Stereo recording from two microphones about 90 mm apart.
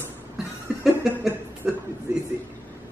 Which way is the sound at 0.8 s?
5° right (ahead or behind).